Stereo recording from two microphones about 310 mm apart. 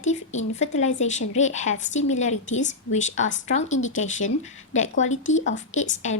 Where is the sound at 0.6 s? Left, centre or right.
Left.